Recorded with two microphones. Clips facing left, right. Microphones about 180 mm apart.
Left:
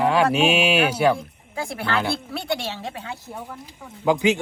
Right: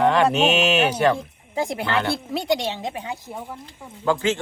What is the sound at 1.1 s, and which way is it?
Speech, 20° right (ahead or behind).